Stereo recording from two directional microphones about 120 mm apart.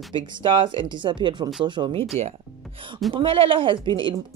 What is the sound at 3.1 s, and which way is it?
Speech, 50° right (ahead or behind).